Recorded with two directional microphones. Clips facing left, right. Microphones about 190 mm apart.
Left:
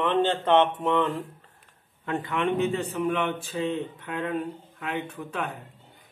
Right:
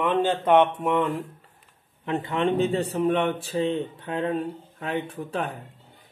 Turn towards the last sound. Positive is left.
turn(degrees=-35)  # may be behind; listen again after turning